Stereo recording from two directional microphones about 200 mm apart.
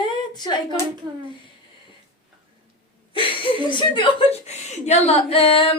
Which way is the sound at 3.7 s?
25° left (ahead or behind).